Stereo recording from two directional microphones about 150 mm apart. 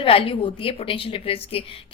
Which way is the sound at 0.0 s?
35° left (ahead or behind).